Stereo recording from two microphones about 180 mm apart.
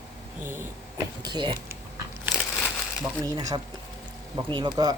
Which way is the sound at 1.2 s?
25° right (ahead or behind).